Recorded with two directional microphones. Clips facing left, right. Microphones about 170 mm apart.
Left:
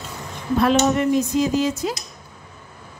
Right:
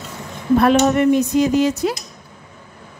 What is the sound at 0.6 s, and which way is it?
A woman's voice, 60° right (ahead or behind).